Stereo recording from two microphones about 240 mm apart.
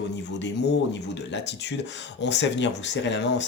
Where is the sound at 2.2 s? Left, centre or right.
Left.